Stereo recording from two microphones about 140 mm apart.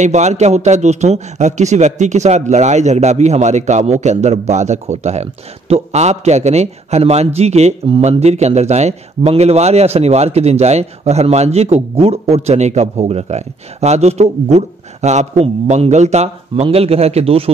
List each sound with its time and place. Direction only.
0.0 s a man's voice: 55° right (ahead or behind)